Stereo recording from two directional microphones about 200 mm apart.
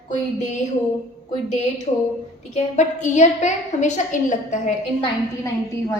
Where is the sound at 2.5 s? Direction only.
35° left (ahead or behind).